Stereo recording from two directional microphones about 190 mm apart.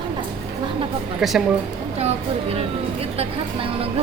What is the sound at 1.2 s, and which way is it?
Speech, centre (ahead or behind).